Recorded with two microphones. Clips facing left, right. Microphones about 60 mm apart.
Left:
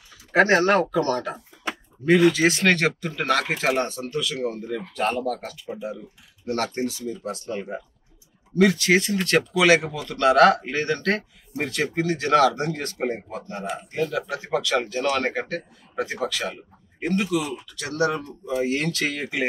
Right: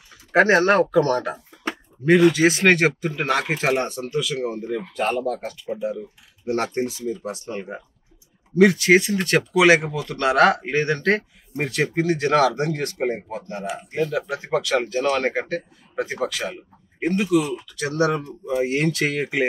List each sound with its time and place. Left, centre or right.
0.4 s speech: centre
2.3 s speech: centre
4.0 s speech: centre